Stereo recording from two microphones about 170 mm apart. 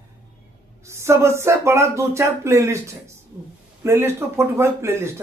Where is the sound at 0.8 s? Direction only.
15° right (ahead or behind).